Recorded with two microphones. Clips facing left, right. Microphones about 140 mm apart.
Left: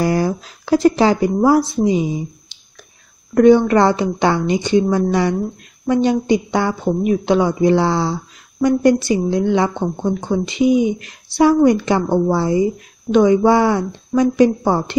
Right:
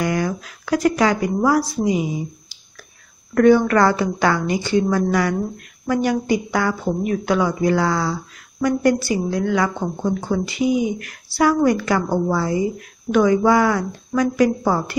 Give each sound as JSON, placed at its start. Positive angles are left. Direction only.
{"t": 0.0, "sound": "a woman's voice", "side_deg": 30}
{"t": 3.3, "sound": "a woman's voice", "side_deg": 20}